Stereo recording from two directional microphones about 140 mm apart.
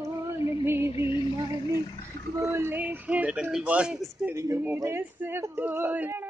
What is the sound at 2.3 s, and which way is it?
A man's voice, 20° right (ahead or behind).